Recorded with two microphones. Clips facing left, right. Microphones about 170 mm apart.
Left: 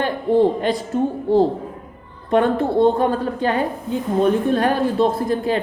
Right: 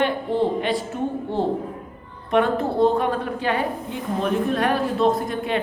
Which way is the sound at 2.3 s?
30° left (ahead or behind).